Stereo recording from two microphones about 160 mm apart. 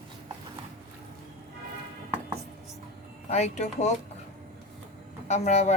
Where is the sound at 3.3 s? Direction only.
45° left (ahead or behind).